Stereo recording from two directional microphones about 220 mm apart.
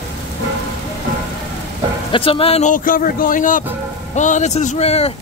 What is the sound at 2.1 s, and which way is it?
A man's voice, 25° left (ahead or behind).